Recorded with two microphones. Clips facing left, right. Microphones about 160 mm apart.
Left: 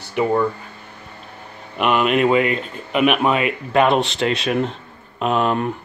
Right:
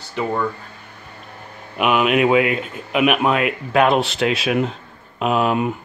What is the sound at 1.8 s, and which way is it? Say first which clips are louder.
Speech: even; 5° right (ahead or behind).